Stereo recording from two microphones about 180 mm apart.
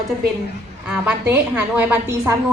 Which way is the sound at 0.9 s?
10° right (ahead or behind).